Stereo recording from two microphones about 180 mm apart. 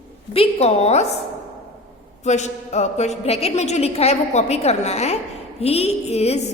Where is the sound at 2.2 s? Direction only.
40° left (ahead or behind).